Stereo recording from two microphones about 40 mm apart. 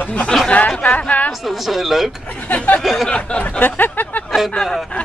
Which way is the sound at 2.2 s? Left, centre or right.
Left.